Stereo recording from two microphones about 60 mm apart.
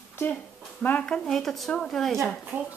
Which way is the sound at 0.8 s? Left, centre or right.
Centre.